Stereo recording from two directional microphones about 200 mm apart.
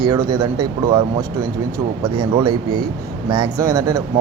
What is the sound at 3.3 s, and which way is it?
Speech, 15° right (ahead or behind).